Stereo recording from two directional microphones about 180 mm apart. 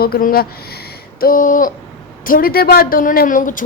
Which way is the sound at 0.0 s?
55° left (ahead or behind).